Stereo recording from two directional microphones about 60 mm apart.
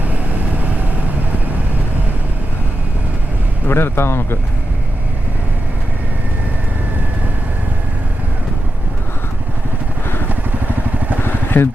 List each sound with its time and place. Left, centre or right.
3.7 s speech: left
10.9 s vehicle: right
11.2 s vehicle: left